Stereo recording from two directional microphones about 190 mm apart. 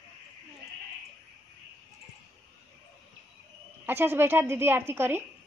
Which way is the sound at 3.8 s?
10° right (ahead or behind).